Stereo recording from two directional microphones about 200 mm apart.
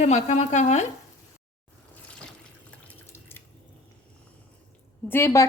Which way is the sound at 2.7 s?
10° left (ahead or behind).